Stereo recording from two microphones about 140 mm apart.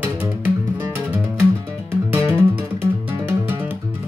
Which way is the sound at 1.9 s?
15° right (ahead or behind).